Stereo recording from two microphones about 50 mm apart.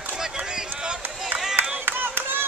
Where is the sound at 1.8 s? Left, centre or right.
Right.